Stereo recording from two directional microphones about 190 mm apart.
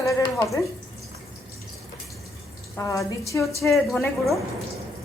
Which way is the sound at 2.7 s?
15° left (ahead or behind).